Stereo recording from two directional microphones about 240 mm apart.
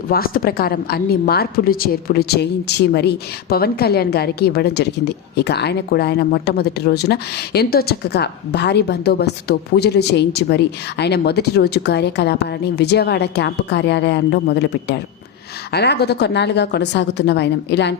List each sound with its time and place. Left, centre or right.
0.1 s a woman's voice: left